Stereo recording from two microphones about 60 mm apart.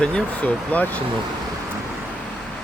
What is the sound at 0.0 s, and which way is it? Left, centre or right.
Speech, centre.